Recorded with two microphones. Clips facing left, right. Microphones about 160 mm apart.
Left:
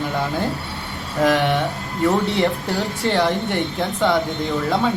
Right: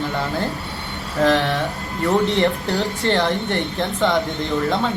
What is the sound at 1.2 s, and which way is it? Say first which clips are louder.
Speech: even; 10° left (ahead or behind).